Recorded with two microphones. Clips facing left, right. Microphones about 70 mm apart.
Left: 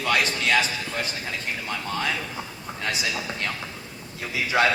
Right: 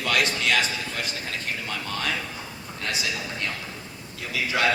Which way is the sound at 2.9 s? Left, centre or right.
Left.